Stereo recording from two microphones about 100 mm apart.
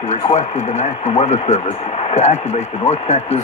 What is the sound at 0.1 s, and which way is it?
Speech, 90° left.